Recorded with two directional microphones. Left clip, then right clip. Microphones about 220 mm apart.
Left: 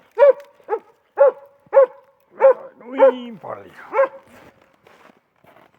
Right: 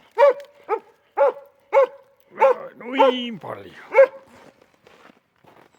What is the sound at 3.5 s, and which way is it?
Speech, 40° right (ahead or behind).